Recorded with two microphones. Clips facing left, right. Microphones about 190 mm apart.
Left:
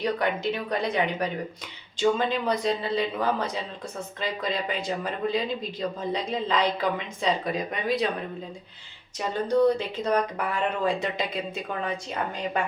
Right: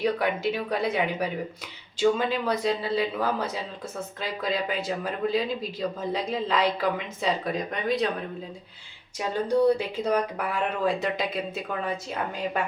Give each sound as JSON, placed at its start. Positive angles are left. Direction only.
{"t": 0.0, "sound": "speech", "side_deg": -5}
{"t": 9.1, "sound": "speech", "side_deg": -10}